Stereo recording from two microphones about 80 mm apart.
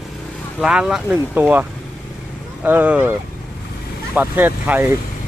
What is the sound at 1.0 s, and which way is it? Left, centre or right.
Speech, right.